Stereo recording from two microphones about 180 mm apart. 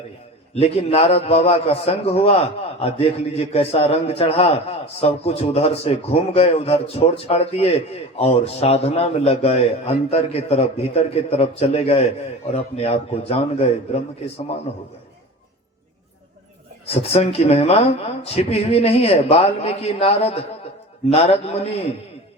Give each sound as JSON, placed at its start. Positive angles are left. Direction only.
{"t": 0.5, "sound": "a man's voice", "side_deg": 35}
{"t": 16.8, "sound": "a man's voice", "side_deg": 35}